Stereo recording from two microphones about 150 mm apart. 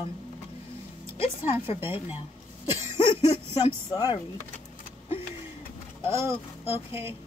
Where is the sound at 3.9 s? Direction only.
25° left (ahead or behind).